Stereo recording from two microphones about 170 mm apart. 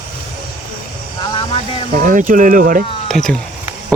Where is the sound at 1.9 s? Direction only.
50° right (ahead or behind).